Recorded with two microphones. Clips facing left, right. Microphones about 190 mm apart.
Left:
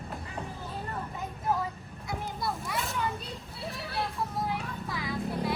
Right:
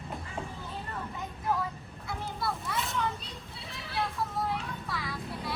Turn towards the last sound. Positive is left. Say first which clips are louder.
# left 6 dB
turn(degrees=20)  # may be behind; listen again after turning